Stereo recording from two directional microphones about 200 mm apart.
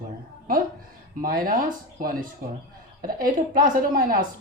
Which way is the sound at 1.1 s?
45° right (ahead or behind).